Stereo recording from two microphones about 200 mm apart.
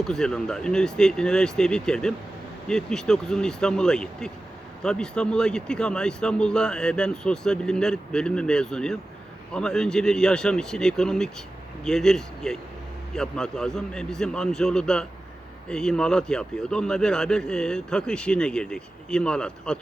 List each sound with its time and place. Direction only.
0.0 s speech: 5° left (ahead or behind)